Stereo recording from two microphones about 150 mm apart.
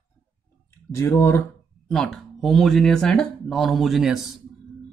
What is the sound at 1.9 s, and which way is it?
Speech, 5° left (ahead or behind).